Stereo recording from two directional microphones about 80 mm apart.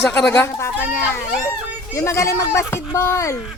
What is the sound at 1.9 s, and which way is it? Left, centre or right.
Speech, left.